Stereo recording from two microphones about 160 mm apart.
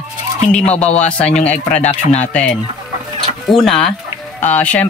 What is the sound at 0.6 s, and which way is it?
Speech, 40° left (ahead or behind).